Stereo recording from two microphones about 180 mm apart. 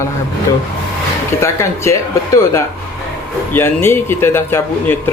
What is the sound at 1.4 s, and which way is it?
Speech, 15° left (ahead or behind).